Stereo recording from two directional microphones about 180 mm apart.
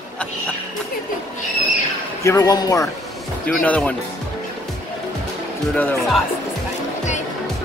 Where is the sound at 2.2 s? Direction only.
20° left (ahead or behind).